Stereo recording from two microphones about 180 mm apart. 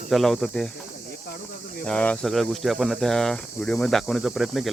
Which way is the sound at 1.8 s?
5° left (ahead or behind).